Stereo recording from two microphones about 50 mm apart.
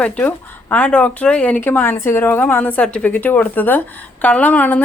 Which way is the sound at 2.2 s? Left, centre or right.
Left.